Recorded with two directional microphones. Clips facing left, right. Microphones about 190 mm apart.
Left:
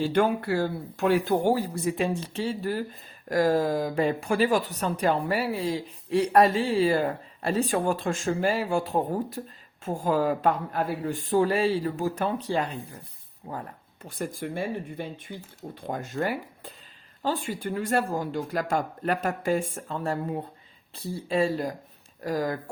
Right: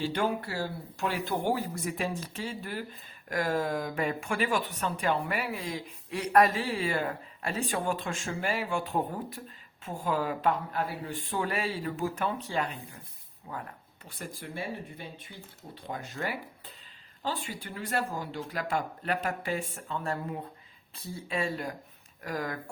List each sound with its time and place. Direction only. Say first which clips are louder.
0.0 s speech: left 6 dB; 50° left (ahead or behind)
1.5 s speech: left 6 dB; 30° left (ahead or behind)
14.0 s speech: left 9 dB; 45° left (ahead or behind)